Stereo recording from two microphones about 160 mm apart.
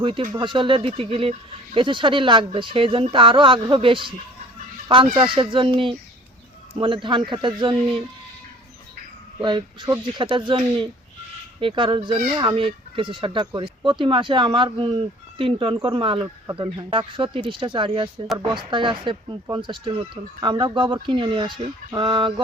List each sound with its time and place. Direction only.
0.0 s speech: 30° right (ahead or behind)
9.4 s speech: 30° right (ahead or behind)